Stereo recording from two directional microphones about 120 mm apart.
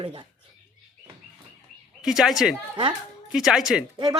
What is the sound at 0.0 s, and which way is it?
Speech, 45° right (ahead or behind).